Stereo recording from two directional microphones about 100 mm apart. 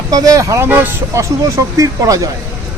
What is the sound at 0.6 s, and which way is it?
Speech, 20° right (ahead or behind).